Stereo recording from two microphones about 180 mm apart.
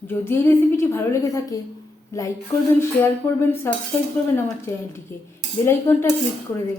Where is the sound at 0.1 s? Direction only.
15° left (ahead or behind).